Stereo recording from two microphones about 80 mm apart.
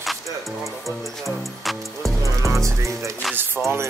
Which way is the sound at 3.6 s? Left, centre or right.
Centre.